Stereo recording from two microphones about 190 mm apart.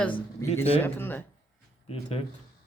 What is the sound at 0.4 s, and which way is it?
Speech, 15° left (ahead or behind).